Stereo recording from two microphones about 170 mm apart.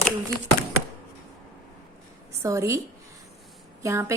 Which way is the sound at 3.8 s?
15° right (ahead or behind).